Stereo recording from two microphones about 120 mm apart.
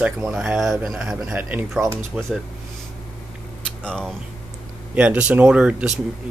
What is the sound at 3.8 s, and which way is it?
Speech, 5° left (ahead or behind).